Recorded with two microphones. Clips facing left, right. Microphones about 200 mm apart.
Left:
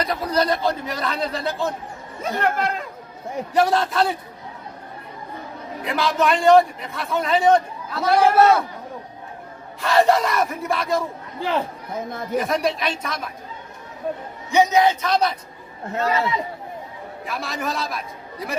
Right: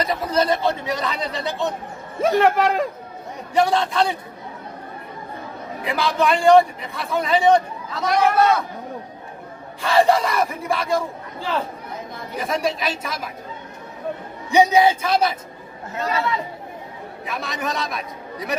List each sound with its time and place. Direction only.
0.0 s a man's voice: centre (ahead or behind)
2.2 s speech: 90° right
3.5 s a man's voice: centre (ahead or behind)
5.8 s a man's voice: centre (ahead or behind)
8.0 s a man's voice: 25° left (ahead or behind)
9.8 s a man's voice: centre (ahead or behind)
11.3 s a man's voice: 20° left (ahead or behind)
12.4 s a man's voice: centre (ahead or behind)
14.5 s a woman's voice: 15° right (ahead or behind)
17.2 s a man's voice: centre (ahead or behind)